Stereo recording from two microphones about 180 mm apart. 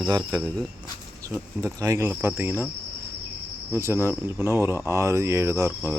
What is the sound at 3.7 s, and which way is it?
Speech, 15° right (ahead or behind).